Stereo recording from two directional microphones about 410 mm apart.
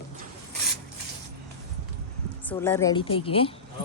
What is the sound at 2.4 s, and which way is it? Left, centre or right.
A woman's voice, centre.